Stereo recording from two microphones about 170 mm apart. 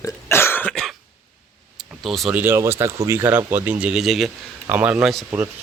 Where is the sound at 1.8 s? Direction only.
Centre (ahead or behind).